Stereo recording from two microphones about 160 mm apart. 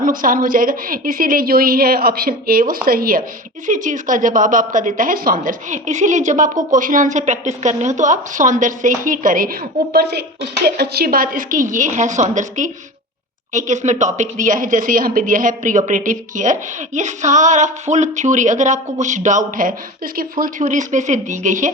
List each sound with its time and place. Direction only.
0.0 s a woman's voice: 60° right (ahead or behind)
3.7 s a woman's voice: 55° right (ahead or behind); by 10.2 s 90° right
10.8 s a woman's voice: 75° right (ahead or behind); by 21.7 s 50° right (ahead or behind)